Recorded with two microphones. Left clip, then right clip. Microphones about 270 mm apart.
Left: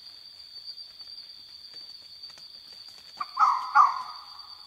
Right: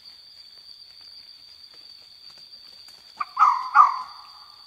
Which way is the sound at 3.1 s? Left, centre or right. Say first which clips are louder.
Right 4 dB; right.